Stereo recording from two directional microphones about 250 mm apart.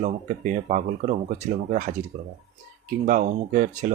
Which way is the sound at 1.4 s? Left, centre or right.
Right.